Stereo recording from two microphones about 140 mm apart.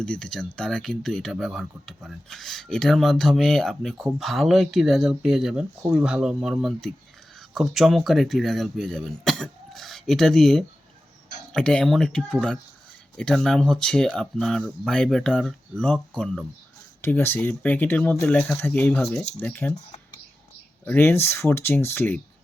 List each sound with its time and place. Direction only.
0.0 s speech: 5° left (ahead or behind)
17.0 s speech: 15° left (ahead or behind)
20.8 s speech: 15° left (ahead or behind)